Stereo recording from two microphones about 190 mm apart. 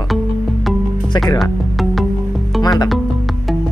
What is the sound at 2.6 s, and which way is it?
Music, 20° left (ahead or behind).